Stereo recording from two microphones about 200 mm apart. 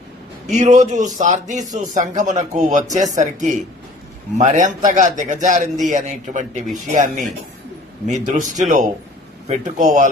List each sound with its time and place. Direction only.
0.5 s a man's voice: 40° right (ahead or behind)
4.4 s a man's voice: 40° right (ahead or behind)